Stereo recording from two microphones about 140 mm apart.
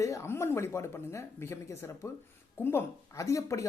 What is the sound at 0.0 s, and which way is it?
Speech, 20° left (ahead or behind).